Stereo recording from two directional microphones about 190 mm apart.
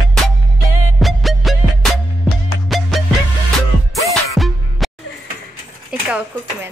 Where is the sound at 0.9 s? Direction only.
Centre (ahead or behind).